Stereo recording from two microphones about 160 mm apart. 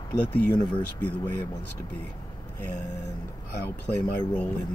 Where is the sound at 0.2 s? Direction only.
10° left (ahead or behind).